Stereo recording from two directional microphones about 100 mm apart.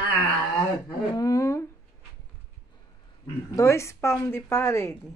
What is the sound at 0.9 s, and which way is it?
Speech, 40° left (ahead or behind).